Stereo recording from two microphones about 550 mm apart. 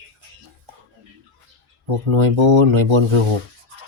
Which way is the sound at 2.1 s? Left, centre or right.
Right.